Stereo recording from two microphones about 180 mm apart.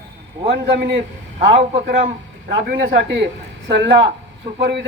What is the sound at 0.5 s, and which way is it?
Speech, 65° right (ahead or behind).